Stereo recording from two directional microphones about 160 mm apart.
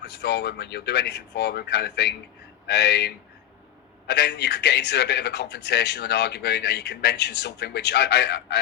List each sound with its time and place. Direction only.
0.0 s a man's voice: 90° left